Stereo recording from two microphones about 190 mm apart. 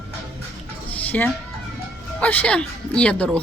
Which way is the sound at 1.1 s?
10° left (ahead or behind).